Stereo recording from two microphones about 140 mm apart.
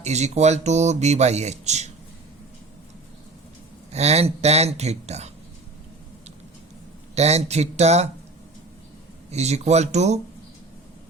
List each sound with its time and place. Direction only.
0.0 s speech: 55° right (ahead or behind)
3.9 s speech: 50° right (ahead or behind)
7.2 s speech: 50° right (ahead or behind)
9.3 s speech: 50° right (ahead or behind)